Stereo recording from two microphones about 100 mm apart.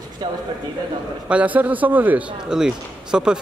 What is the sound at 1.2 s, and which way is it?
Speech, 15° right (ahead or behind).